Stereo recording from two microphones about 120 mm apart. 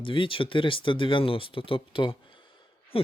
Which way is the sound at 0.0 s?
45° left (ahead or behind).